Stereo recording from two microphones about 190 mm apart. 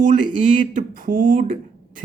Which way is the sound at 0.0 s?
45° right (ahead or behind).